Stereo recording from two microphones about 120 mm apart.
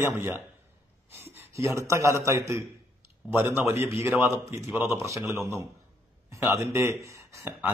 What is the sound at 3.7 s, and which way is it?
A man's voice, 20° right (ahead or behind).